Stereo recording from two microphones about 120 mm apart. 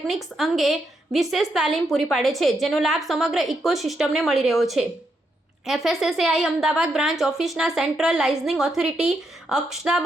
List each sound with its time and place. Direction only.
0.1 s a woman's voice: centre (ahead or behind)